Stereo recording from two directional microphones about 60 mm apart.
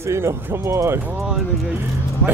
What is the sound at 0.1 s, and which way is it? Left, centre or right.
Speech, right.